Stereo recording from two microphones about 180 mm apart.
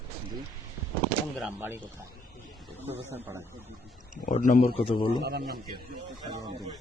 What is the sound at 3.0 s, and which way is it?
Speech, 10° right (ahead or behind).